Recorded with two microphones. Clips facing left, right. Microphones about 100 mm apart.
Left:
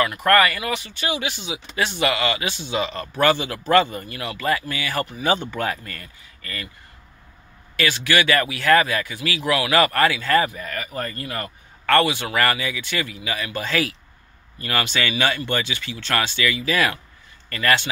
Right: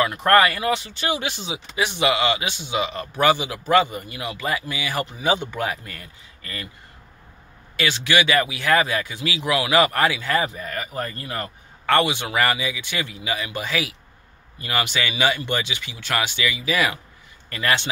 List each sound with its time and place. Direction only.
0.0 s speech: 25° right (ahead or behind)
1.8 s a man's voice: 15° right (ahead or behind)
7.7 s a man's voice: 20° right (ahead or behind)